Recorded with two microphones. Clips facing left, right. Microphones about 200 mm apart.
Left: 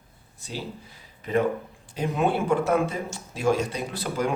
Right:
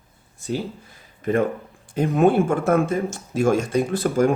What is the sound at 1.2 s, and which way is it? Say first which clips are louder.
Speech: right 3 dB; 50° right (ahead or behind).